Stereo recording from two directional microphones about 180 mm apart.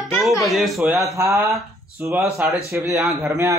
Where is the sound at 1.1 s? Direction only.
15° right (ahead or behind).